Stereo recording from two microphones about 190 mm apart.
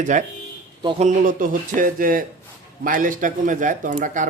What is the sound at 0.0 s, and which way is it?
Speech, 40° right (ahead or behind).